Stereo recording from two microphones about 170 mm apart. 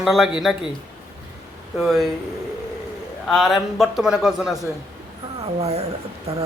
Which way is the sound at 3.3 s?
Centre (ahead or behind).